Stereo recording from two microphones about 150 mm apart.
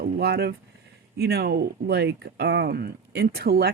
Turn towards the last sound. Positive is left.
turn(degrees=-90)